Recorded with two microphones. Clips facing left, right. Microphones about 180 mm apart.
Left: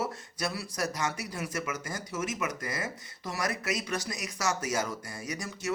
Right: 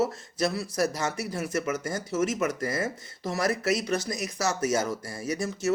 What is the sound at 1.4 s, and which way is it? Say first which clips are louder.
Speech: right 6 dB; 40° right (ahead or behind).